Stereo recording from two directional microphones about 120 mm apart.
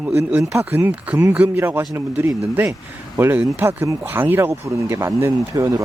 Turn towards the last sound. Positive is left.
turn(degrees=-25)  # may be behind; listen again after turning